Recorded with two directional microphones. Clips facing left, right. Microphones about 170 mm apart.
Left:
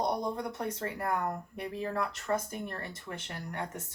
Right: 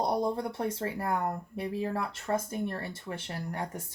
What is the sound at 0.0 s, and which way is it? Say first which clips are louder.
Speech: right 3 dB; 30° right (ahead or behind).